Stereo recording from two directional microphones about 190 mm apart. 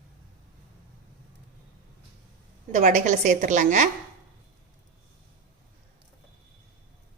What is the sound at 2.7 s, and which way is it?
A woman's voice, 40° right (ahead or behind).